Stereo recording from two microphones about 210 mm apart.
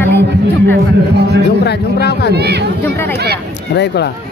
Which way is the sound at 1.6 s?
50° left (ahead or behind).